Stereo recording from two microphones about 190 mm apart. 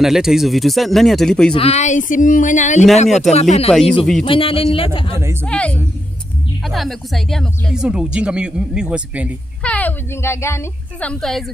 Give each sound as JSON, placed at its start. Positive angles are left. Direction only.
{"t": 0.0, "sound": "speech", "side_deg": 0}
{"t": 1.5, "sound": "speech", "side_deg": 30}
{"t": 3.1, "sound": "speech", "side_deg": 0}
{"t": 3.3, "sound": "a man's voice", "side_deg": 35}
{"t": 5.4, "sound": "speech", "side_deg": 5}
{"t": 9.6, "sound": "a woman's voice", "side_deg": 5}